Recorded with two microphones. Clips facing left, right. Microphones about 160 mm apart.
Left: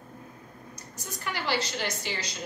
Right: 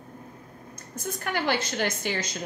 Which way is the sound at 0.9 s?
50° right (ahead or behind).